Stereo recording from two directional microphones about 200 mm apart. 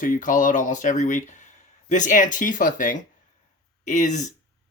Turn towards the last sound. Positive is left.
turn(degrees=40)  # may be behind; listen again after turning